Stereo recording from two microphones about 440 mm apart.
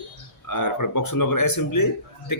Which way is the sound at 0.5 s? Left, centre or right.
Left.